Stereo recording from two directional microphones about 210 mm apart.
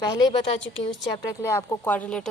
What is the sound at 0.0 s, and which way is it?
Speech, 20° left (ahead or behind).